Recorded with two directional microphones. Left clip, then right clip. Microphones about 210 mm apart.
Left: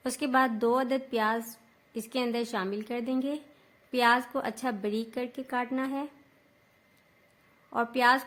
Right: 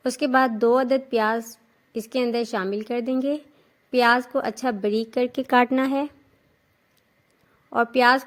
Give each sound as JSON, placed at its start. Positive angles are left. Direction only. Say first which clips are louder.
{"t": 0.0, "sound": "a woman's voice", "louder": "right 6 dB", "side_deg": -25}
{"t": 7.7, "sound": "a woman's voice", "louder": "right 6 dB", "side_deg": -30}